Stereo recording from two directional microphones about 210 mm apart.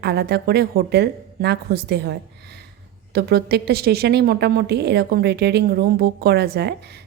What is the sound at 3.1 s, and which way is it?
A woman's voice, 50° right (ahead or behind).